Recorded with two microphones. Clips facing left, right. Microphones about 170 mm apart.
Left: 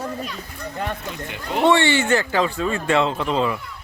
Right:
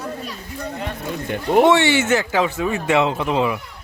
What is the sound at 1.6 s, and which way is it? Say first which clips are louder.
Speech: right 1 dB; 15° right (ahead or behind).